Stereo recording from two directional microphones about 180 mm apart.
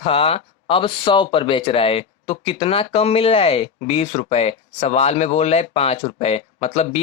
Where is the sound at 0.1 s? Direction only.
35° left (ahead or behind).